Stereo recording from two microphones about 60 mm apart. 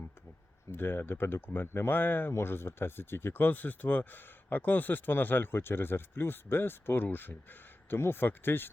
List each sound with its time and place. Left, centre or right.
0.7 s speech: left